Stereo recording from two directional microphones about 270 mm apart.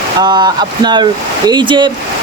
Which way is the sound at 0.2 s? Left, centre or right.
Centre.